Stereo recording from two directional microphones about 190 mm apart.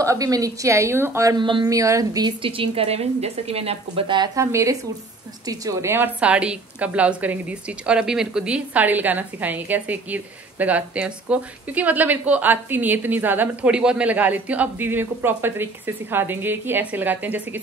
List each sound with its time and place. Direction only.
0.0 s a woman's voice: 15° right (ahead or behind)